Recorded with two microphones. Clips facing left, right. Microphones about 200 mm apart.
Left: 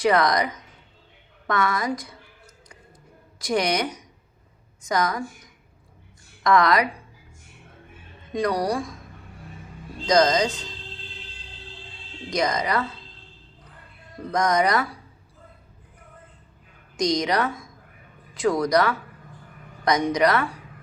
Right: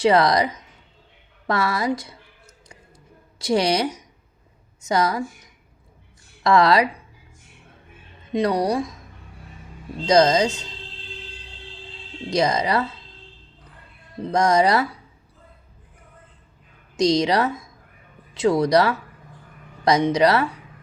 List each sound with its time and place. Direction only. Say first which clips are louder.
0.0 s a woman's voice: right 3 dB; 30° right (ahead or behind)
3.3 s a woman's voice: right 3 dB; 25° right (ahead or behind)
6.4 s a woman's voice: right 3 dB; 25° right (ahead or behind)
8.3 s a woman's voice: right 3 dB; 25° right (ahead or behind)
10.1 s a woman's voice: right 3 dB; 25° right (ahead or behind)
12.3 s a woman's voice: right 3 dB; 25° right (ahead or behind)
14.2 s a woman's voice: right 3 dB; 25° right (ahead or behind)
17.0 s a woman's voice: right 4 dB; 25° right (ahead or behind)